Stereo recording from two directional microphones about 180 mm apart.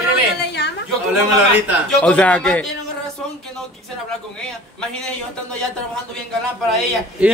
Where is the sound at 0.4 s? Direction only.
70° left (ahead or behind).